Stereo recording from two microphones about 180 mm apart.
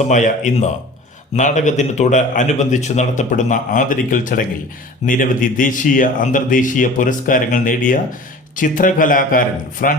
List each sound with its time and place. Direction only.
0.0 s a man's voice: 45° left (ahead or behind)